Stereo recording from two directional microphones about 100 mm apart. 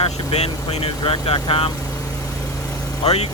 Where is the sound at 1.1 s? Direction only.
70° left (ahead or behind).